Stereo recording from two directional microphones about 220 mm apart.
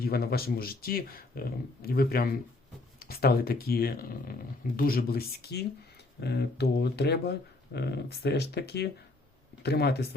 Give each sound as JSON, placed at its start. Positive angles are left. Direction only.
{"t": 0.0, "sound": "speech", "side_deg": 45}